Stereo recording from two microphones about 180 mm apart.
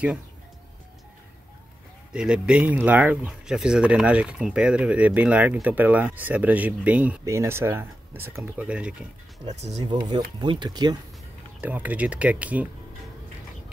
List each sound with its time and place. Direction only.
2.1 s speech: 5° right (ahead or behind)
9.5 s speech: 40° right (ahead or behind)
9.8 s speech: 25° right (ahead or behind)
11.6 s speech: 10° right (ahead or behind)